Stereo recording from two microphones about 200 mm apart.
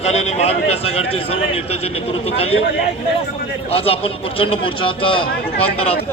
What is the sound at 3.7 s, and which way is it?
A man's voice, 30° left (ahead or behind).